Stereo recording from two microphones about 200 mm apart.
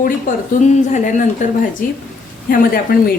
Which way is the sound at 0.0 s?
40° left (ahead or behind).